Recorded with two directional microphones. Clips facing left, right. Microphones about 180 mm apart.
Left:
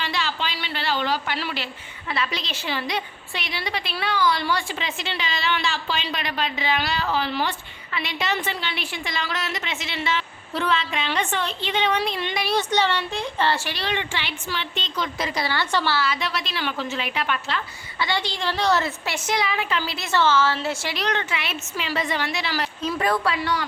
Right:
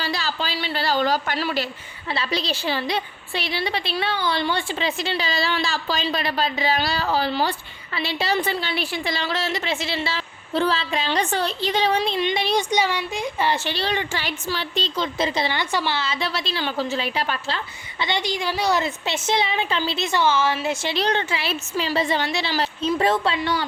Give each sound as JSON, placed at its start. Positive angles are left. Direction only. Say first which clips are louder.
{"t": 0.0, "sound": "a sound", "louder": "right 1 dB", "side_deg": -35}
{"t": 2.1, "sound": "a woman's voice", "louder": "right 3 dB", "side_deg": -30}
{"t": 12.5, "sound": "a woman's voice", "louder": "right 1 dB", "side_deg": -10}
{"t": 13.7, "sound": "a woman's voice", "louder": "right 3 dB", "side_deg": -30}
{"t": 18.0, "sound": "a woman's voice", "louder": "right 1 dB", "side_deg": -15}
{"t": 20.9, "sound": "a woman's voice", "louder": "right 3 dB", "side_deg": -30}